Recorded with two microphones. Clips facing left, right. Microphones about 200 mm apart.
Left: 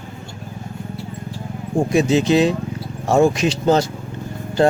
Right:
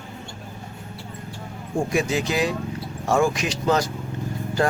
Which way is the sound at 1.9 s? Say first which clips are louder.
Left 9 dB; 25° left (ahead or behind).